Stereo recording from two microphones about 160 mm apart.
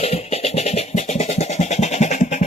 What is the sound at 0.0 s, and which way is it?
Music, 40° left (ahead or behind).